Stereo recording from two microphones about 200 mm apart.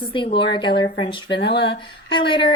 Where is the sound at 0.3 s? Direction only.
25° left (ahead or behind).